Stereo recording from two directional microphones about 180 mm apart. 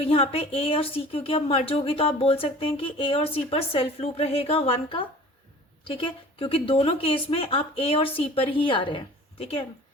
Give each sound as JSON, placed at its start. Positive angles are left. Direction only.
{"t": 0.0, "sound": "a woman's voice", "side_deg": 30}